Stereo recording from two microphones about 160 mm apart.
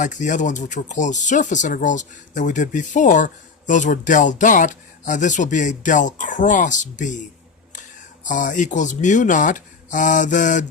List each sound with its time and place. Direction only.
0.0 s speech: 50° left (ahead or behind)
8.2 s speech: 55° left (ahead or behind)